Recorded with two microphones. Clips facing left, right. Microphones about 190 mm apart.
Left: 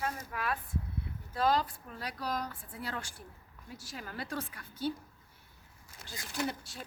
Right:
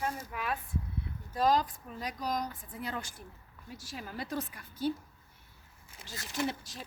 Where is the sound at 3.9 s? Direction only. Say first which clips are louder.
Right 2 dB; 5° right (ahead or behind).